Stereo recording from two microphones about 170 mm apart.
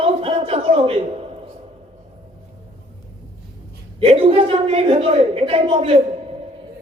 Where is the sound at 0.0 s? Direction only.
35° right (ahead or behind).